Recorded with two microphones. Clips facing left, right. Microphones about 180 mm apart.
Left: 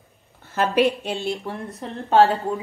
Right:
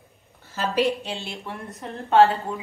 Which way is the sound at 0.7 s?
60° left (ahead or behind).